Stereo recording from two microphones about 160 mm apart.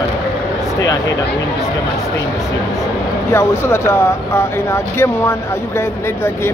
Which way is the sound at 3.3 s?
15° left (ahead or behind).